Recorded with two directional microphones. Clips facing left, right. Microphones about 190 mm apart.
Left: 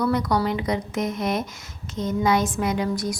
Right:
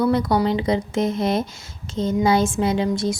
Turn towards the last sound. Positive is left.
turn(degrees=-25)  # may be behind; listen again after turning